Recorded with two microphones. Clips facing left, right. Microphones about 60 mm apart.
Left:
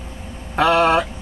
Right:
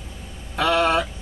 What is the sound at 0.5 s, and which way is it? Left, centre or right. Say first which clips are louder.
Speech: left 4 dB; left.